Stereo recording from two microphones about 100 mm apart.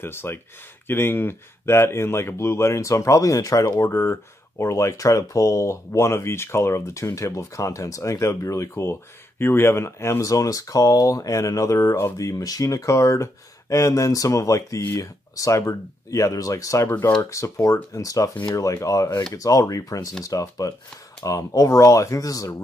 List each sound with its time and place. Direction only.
0.0 s speech: 25° left (ahead or behind)